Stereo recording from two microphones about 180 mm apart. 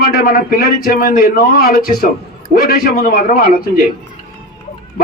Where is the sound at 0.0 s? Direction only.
55° left (ahead or behind).